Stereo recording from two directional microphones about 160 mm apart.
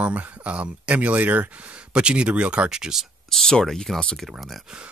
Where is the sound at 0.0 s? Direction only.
10° right (ahead or behind).